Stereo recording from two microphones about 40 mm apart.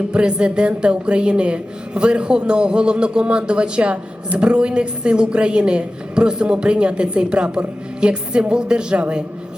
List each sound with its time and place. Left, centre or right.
0.1 s speech: right